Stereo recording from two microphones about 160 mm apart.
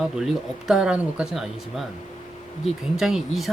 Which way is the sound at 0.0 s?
Centre (ahead or behind).